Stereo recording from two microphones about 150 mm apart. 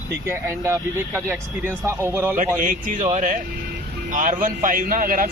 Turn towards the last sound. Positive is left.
turn(degrees=-65)  # may be behind; listen again after turning